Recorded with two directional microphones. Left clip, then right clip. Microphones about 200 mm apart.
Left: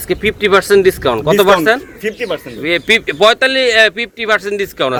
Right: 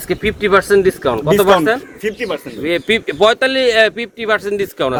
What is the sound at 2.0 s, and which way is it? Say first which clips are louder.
Speech: left 1 dB; 60° right (ahead or behind).